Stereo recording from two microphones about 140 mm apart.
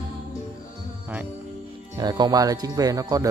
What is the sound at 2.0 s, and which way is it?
Speech, 30° right (ahead or behind).